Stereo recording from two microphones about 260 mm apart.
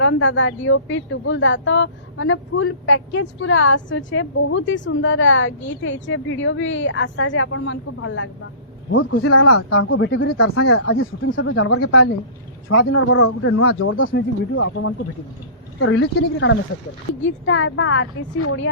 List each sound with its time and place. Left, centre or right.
0.0 s speech: left
10.3 s speech: left